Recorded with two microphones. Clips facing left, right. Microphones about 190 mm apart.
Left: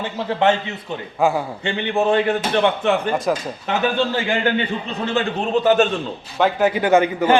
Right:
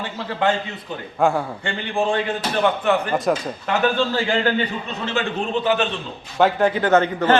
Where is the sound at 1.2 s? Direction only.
5° left (ahead or behind).